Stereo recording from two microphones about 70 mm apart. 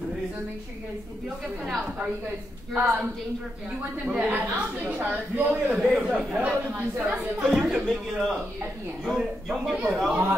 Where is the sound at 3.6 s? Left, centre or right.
Centre.